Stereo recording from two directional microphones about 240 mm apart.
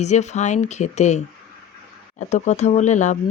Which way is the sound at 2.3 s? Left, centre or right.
Left.